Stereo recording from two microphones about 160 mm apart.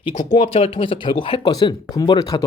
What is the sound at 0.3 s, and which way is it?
Speech, 40° left (ahead or behind).